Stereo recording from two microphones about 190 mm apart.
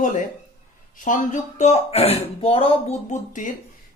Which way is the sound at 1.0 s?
40° left (ahead or behind).